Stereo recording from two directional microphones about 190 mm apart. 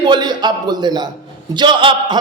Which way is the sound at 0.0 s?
25° right (ahead or behind).